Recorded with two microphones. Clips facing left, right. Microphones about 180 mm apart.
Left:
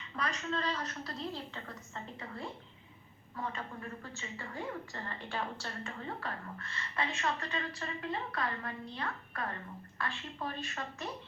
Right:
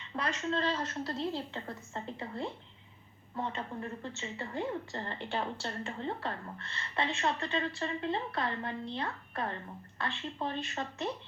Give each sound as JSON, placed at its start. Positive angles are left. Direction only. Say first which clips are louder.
{"t": 0.2, "sound": "a woman's voice", "louder": "right 3 dB", "side_deg": -30}